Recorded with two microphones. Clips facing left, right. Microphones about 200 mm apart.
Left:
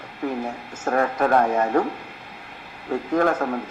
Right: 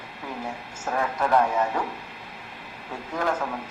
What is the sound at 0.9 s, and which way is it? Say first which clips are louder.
Speech: left 4 dB; 55° left (ahead or behind).